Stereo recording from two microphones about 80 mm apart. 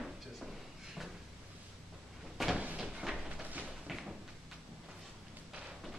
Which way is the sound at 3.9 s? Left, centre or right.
Centre.